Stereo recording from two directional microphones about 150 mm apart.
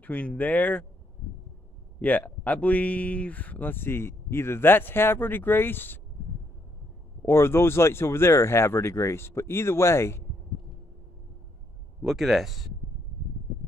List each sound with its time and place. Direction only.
0.0 s speech: 10° left (ahead or behind)
2.0 s speech: 10° left (ahead or behind)
7.2 s speech: 15° left (ahead or behind)
12.0 s speech: centre (ahead or behind)